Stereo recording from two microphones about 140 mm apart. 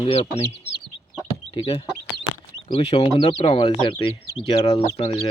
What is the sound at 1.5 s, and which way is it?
Speech, 40° left (ahead or behind).